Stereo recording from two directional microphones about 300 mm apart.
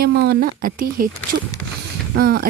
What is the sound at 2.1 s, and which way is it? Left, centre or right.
Speech, right.